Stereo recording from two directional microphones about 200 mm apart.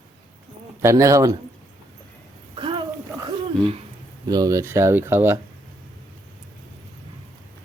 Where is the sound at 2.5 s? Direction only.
25° right (ahead or behind).